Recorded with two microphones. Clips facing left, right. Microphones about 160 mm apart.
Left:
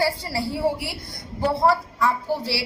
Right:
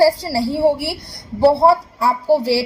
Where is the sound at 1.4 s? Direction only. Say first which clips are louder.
Right 8 dB; 35° right (ahead or behind).